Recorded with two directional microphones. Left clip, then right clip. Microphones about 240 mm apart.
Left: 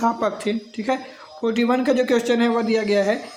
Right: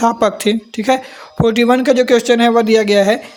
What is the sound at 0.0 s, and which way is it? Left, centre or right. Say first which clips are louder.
Speech: right 8 dB; right.